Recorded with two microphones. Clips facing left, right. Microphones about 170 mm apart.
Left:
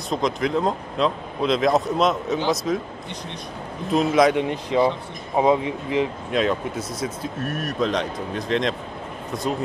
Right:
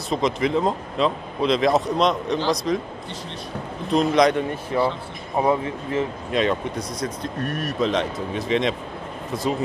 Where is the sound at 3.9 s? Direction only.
5° left (ahead or behind).